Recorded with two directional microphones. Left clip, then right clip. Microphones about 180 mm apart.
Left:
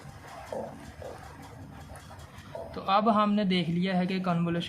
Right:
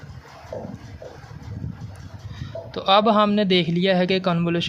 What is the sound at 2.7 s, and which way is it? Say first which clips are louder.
A man's voice: right 8 dB; 40° right (ahead or behind).